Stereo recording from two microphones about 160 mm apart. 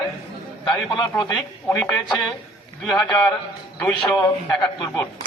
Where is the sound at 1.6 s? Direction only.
10° left (ahead or behind).